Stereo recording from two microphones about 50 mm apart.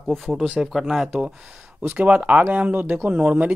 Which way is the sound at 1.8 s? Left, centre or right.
Right.